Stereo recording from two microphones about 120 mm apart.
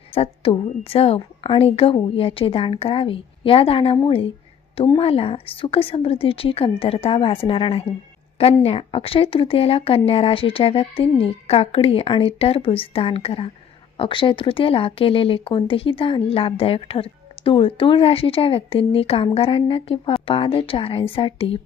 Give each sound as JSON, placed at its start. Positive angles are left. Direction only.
{"t": 0.1, "sound": "speech", "side_deg": 50}